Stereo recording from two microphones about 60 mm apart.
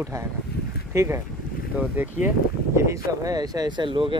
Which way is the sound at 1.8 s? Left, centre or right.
Right.